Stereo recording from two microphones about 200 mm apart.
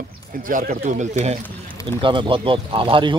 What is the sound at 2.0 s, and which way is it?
Speech, 25° right (ahead or behind).